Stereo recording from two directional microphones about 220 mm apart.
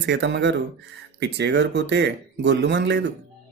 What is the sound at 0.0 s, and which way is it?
Speech, 50° right (ahead or behind).